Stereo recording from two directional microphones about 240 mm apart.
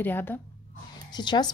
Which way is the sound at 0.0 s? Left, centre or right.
Centre.